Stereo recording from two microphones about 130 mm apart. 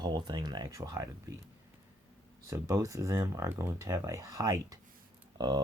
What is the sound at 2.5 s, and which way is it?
Speech, 25° right (ahead or behind).